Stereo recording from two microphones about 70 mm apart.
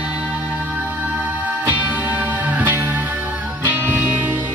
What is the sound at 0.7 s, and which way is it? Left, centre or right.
Music, right.